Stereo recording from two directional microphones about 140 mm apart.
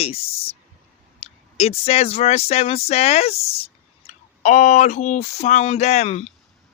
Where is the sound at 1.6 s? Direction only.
45° left (ahead or behind).